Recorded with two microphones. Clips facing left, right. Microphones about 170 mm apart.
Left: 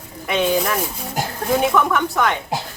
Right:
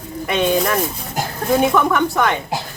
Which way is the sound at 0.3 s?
Centre (ahead or behind).